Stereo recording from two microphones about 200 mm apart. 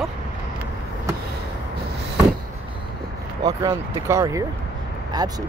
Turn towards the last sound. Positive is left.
turn(degrees=-20)  # may be behind; listen again after turning